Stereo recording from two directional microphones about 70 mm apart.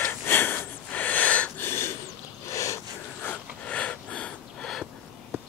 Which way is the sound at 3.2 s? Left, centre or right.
Left.